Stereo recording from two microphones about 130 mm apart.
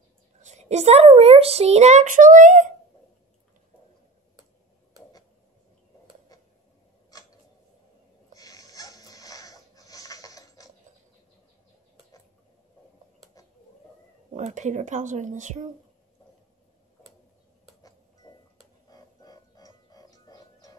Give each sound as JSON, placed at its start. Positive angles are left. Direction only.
{"t": 0.4, "sound": "a child's voice", "side_deg": -60}
{"t": 8.4, "sound": "a sound", "side_deg": 30}
{"t": 14.3, "sound": "speech", "side_deg": -65}
{"t": 18.9, "sound": "music", "side_deg": 30}